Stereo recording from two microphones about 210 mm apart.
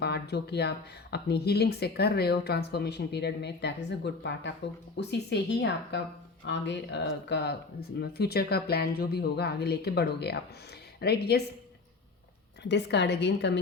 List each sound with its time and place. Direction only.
0.0 s speech: 50° left (ahead or behind)
12.6 s a woman's voice: 55° left (ahead or behind)